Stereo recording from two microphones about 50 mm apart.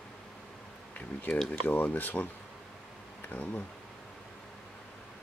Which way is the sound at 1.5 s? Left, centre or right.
Left.